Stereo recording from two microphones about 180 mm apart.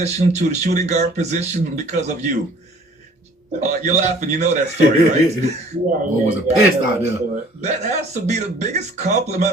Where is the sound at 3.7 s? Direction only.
40° right (ahead or behind).